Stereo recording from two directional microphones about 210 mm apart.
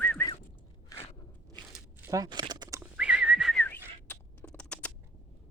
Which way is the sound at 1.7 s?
10° right (ahead or behind).